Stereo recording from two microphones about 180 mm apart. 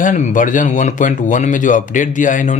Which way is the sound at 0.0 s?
45° left (ahead or behind).